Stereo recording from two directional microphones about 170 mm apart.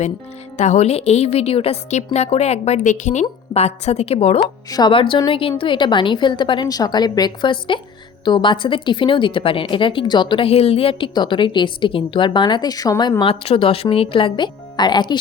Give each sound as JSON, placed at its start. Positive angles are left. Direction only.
{"t": 0.5, "sound": "a woman's voice", "side_deg": 45}